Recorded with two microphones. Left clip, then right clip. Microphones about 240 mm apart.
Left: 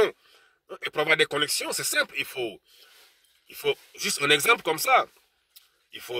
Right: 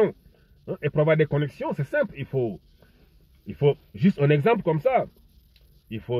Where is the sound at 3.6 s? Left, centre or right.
Left.